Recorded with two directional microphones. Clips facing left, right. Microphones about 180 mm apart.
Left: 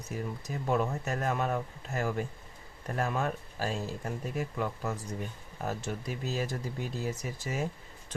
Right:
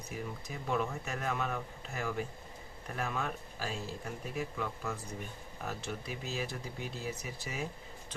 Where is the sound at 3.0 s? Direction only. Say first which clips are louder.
Left 5 dB; 40° left (ahead or behind).